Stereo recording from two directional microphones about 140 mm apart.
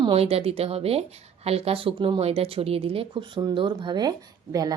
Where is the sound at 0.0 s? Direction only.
45° right (ahead or behind).